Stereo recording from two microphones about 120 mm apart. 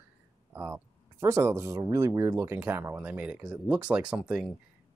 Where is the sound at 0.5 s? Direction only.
15° right (ahead or behind).